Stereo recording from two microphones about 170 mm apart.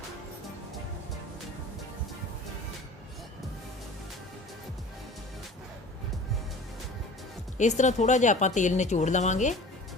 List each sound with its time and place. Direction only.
7.6 s a woman's voice: 45° left (ahead or behind)